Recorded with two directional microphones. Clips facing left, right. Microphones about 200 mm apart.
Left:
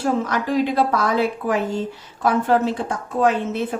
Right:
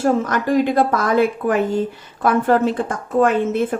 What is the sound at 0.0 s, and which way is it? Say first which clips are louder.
A woman's voice: right 3 dB; 45° right (ahead or behind).